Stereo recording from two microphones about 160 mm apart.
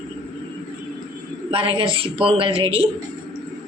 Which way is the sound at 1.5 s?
35° right (ahead or behind).